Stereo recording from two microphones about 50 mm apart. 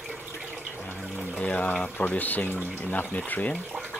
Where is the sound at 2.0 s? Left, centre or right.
Left.